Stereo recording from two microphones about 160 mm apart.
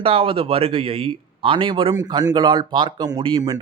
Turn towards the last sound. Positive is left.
turn(degrees=-30)  # may be behind; listen again after turning